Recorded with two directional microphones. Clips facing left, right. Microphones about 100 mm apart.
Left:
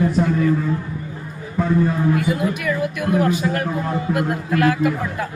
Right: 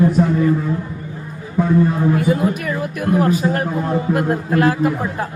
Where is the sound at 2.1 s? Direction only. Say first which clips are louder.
Right 3 dB; 35° right (ahead or behind).